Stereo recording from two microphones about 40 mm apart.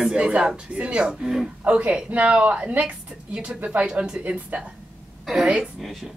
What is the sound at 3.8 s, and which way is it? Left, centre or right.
Speech, centre.